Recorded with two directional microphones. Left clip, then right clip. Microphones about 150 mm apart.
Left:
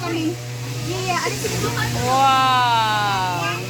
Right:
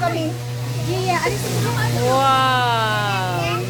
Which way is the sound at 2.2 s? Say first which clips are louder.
Left 2 dB; 35° right (ahead or behind).